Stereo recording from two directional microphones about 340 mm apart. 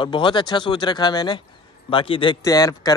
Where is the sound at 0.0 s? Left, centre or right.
Centre.